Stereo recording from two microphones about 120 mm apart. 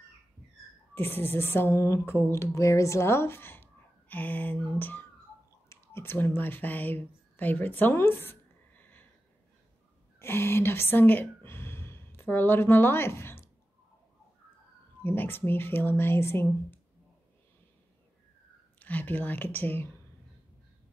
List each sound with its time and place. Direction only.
0.9 s speech: 15° left (ahead or behind)
10.1 s speech: 20° left (ahead or behind)
15.0 s speech: 15° left (ahead or behind)
18.8 s speech: 15° left (ahead or behind)